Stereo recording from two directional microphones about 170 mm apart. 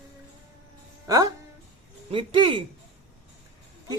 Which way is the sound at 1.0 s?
20° right (ahead or behind).